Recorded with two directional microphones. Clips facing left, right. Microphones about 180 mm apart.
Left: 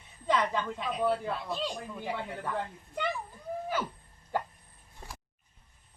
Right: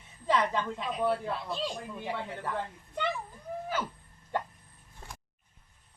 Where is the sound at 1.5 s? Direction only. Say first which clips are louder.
Even; centre (ahead or behind).